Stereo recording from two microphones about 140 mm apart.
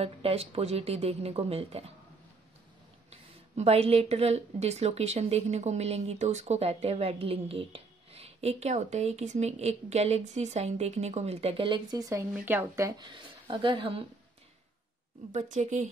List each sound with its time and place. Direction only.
0.0 s speech: 45° right (ahead or behind)
3.1 s speech: 50° right (ahead or behind)
15.3 s a woman's voice: 60° right (ahead or behind)